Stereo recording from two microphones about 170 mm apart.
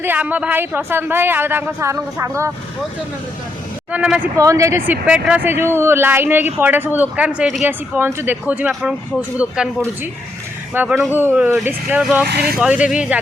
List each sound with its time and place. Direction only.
0.0 s speech: 10° right (ahead or behind)
3.9 s speech: 5° right (ahead or behind)
4.4 s speech: 20° right (ahead or behind)
10.8 s speech: 5° right (ahead or behind)
12.3 s speech: 70° right (ahead or behind)
12.5 s speech: 5° right (ahead or behind)